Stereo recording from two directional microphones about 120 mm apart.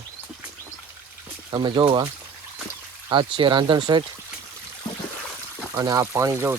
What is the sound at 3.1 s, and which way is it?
Speech, 40° right (ahead or behind).